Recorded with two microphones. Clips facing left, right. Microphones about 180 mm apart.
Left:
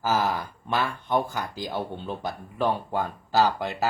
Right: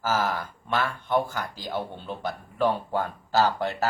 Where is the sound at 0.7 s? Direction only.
15° left (ahead or behind).